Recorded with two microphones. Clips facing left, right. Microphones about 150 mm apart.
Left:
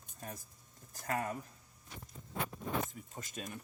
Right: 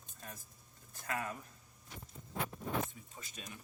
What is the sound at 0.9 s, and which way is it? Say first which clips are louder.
Speech: left 3 dB; 40° left (ahead or behind).